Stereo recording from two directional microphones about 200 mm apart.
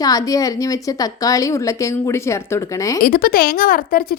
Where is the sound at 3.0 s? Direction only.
50° left (ahead or behind).